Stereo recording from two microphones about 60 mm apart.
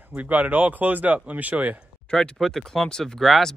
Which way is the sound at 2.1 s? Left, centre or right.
Centre.